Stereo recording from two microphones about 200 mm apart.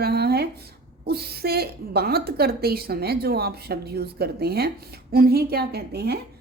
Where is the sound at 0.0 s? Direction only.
50° right (ahead or behind).